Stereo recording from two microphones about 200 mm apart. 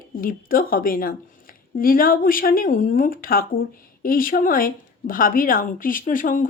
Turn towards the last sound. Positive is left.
turn(degrees=45)  # may be behind; listen again after turning